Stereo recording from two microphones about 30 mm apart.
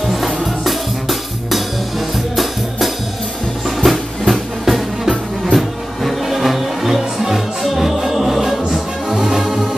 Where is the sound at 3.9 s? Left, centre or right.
Centre.